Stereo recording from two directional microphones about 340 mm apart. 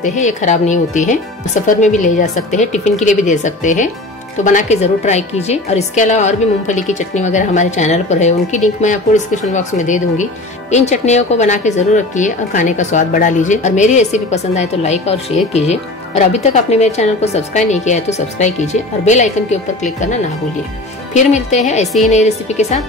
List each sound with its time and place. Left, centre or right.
0.0 s a woman's voice: left